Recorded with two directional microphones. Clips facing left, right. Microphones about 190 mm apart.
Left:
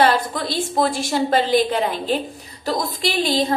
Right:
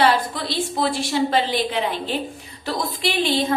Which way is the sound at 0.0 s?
45° left (ahead or behind).